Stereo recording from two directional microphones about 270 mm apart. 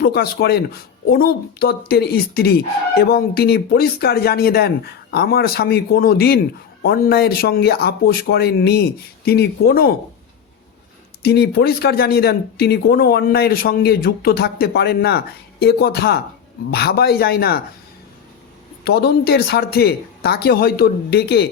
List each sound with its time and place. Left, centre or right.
0.0 s speech: left
11.2 s speech: left
18.9 s speech: left